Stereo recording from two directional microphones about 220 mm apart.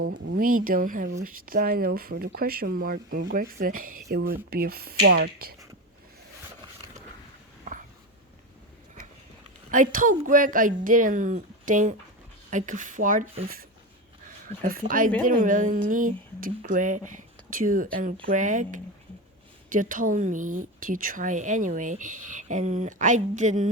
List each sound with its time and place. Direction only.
0.0 s speech: 60° right (ahead or behind)
0.3 s speech: 40° right (ahead or behind)
7.6 s a sound: 35° right (ahead or behind)
9.7 s speech: 40° right (ahead or behind)
17.2 s a sound: 40° right (ahead or behind)
18.3 s speech: 35° right (ahead or behind)